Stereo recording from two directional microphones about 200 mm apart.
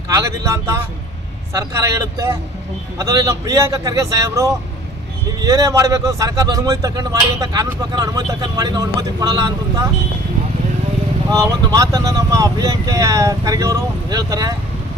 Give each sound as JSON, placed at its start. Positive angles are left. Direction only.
{"t": 0.1, "sound": "speech", "side_deg": -15}
{"t": 11.3, "sound": "speech", "side_deg": -15}